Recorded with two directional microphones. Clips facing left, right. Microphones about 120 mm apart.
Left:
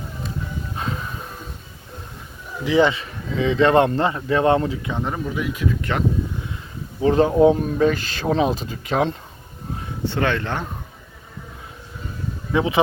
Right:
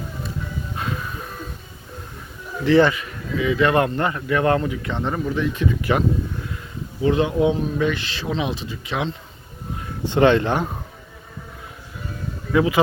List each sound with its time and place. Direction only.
0.8 s music: 25° left (ahead or behind)
2.6 s speech: 15° left (ahead or behind)
2.9 s speech: 30° left (ahead or behind)
4.9 s speech: 5° left (ahead or behind)
7.0 s speech: 35° left (ahead or behind)
10.0 s speech: 20° right (ahead or behind)
12.5 s speech: 25° left (ahead or behind)